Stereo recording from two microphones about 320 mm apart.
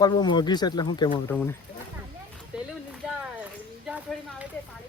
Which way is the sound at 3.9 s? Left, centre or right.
Centre.